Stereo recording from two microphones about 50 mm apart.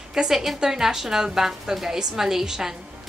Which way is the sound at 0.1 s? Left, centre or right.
Centre.